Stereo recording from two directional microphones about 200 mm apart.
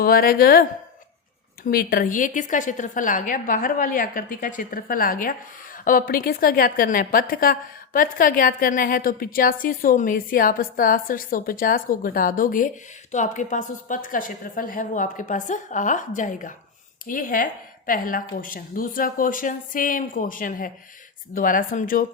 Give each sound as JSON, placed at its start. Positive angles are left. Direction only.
{"t": 0.0, "sound": "a woman's voice", "side_deg": 45}
{"t": 1.6, "sound": "a woman's voice", "side_deg": 45}